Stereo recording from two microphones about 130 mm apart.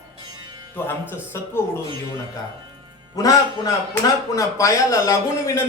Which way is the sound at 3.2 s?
30° left (ahead or behind).